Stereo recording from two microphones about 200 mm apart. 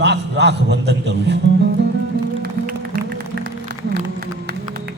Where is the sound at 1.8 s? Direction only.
60° right (ahead or behind).